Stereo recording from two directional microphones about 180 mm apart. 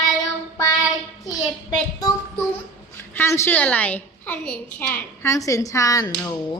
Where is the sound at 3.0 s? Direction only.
15° left (ahead or behind).